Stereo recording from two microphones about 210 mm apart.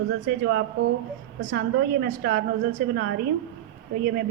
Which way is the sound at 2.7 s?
55° right (ahead or behind).